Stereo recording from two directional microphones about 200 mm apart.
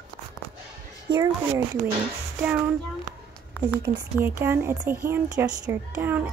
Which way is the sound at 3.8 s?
10° right (ahead or behind).